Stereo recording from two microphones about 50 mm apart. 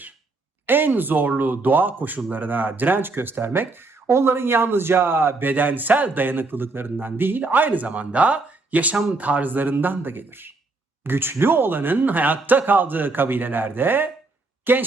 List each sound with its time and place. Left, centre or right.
0.7 s speech: right